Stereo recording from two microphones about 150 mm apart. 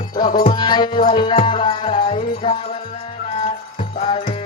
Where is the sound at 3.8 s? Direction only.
35° left (ahead or behind).